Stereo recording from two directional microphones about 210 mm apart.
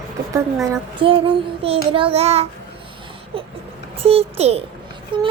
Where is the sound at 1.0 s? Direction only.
25° right (ahead or behind).